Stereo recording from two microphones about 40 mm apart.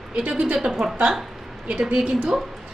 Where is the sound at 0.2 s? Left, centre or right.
Right.